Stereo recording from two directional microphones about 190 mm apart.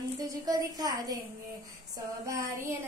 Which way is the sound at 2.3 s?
15° right (ahead or behind).